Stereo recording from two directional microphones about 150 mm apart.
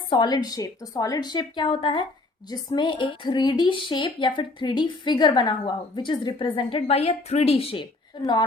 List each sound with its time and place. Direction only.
0.1 s a woman's voice: 30° left (ahead or behind)
8.2 s a woman's voice: 30° left (ahead or behind)